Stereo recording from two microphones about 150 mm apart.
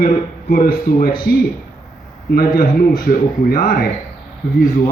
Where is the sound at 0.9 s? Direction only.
90° left.